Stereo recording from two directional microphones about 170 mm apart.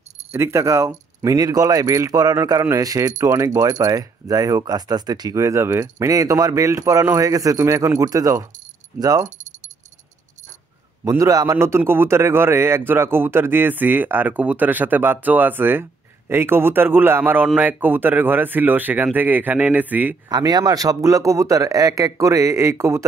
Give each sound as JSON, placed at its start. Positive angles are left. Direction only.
{"t": 0.3, "sound": "speech", "side_deg": -15}
{"t": 11.1, "sound": "a man's voice", "side_deg": -20}
{"t": 20.2, "sound": "speech", "side_deg": -25}